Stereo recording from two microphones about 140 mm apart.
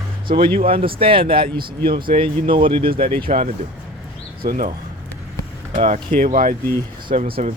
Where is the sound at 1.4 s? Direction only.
90° right.